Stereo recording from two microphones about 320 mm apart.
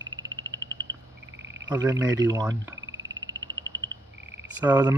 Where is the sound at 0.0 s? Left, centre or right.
Right.